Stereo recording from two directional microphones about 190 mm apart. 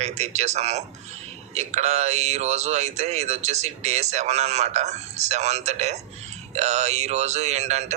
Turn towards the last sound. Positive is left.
turn(degrees=-35)  # may be behind; listen again after turning